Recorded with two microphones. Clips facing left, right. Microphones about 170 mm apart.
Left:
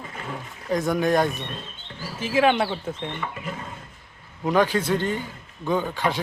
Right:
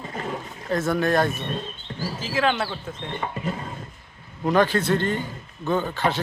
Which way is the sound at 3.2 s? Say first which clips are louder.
Right 2 dB; 40° right (ahead or behind).